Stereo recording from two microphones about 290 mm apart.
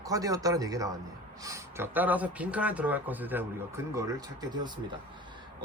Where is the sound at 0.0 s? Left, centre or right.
Centre.